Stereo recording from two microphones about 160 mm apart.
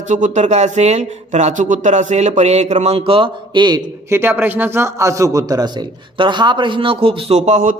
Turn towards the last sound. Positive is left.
turn(degrees=-50)  # may be behind; listen again after turning